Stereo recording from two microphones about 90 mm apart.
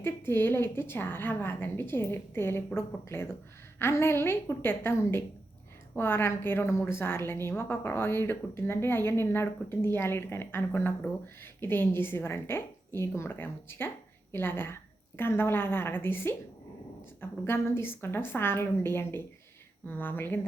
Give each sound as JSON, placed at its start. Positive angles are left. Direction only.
{"t": 0.0, "sound": "a woman's voice", "side_deg": 25}